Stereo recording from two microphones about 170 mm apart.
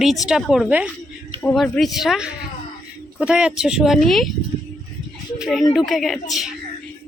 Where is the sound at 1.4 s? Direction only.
5° left (ahead or behind).